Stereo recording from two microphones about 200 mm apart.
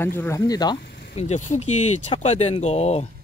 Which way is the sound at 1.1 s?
35° left (ahead or behind).